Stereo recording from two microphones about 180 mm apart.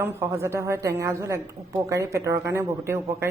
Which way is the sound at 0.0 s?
15° right (ahead or behind).